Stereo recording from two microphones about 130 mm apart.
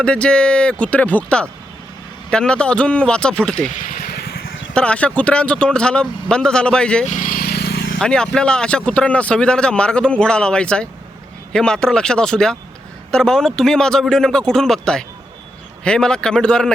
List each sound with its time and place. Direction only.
0.0 s speech: 5° left (ahead or behind)
4.7 s speech: 10° left (ahead or behind)
7.1 s vehicle: 90° left
7.9 s a man's voice: 5° left (ahead or behind)